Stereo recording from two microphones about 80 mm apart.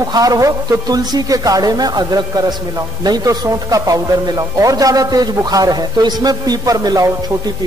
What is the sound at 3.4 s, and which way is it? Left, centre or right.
Speech, right.